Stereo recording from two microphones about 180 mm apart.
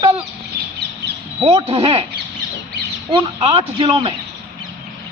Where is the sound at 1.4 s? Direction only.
35° right (ahead or behind).